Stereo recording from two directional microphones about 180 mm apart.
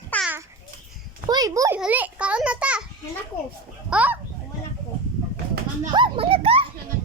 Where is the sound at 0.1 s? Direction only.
10° left (ahead or behind).